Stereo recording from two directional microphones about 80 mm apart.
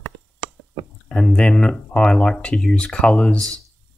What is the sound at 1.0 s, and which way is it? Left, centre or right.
Speech, centre.